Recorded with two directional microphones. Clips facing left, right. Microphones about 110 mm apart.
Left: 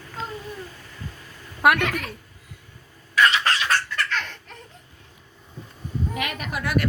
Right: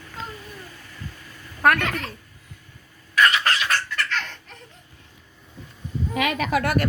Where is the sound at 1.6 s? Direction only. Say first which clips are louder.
Even; 15° left (ahead or behind).